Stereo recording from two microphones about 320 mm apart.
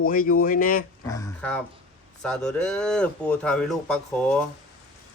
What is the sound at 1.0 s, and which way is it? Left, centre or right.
Speech, centre.